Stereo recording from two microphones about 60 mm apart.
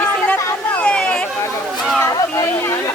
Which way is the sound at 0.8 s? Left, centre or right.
Centre.